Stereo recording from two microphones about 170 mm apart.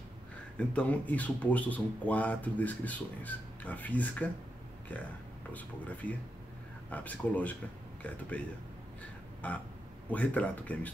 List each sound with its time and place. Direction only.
0.6 s speech: 10° left (ahead or behind)
5.5 s speech: 10° left (ahead or behind)